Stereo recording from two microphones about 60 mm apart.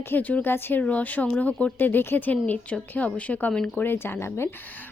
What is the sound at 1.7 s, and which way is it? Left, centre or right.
Speech, left.